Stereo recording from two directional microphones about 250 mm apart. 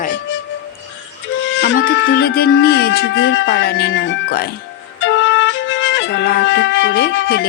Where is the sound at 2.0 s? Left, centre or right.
Left.